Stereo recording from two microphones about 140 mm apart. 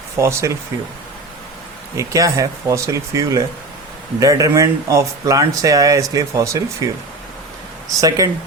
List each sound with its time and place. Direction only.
0.2 s speech: 20° right (ahead or behind)
2.0 s speech: 25° right (ahead or behind)
8.0 s speech: 25° right (ahead or behind)